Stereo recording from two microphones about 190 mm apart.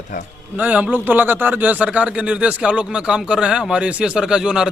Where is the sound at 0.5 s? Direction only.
10° right (ahead or behind).